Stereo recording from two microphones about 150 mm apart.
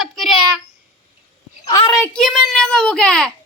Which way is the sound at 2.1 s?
Centre (ahead or behind).